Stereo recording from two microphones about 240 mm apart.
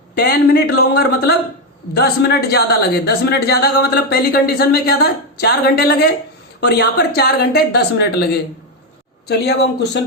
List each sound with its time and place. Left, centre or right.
0.1 s a woman's voice: left